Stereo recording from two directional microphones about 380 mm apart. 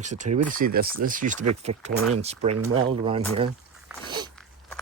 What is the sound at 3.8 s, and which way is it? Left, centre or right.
Dog, centre.